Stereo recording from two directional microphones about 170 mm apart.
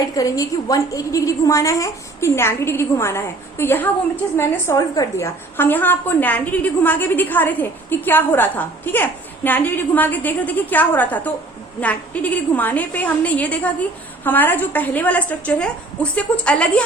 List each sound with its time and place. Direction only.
0.0 s a woman's voice: 20° left (ahead or behind)